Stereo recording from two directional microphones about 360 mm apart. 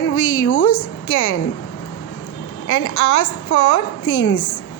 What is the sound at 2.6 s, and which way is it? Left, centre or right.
A woman's voice, left.